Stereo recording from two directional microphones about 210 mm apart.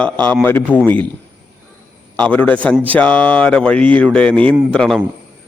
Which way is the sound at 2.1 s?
5° left (ahead or behind).